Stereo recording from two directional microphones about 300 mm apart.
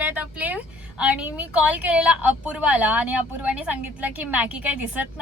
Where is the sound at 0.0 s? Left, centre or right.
Centre.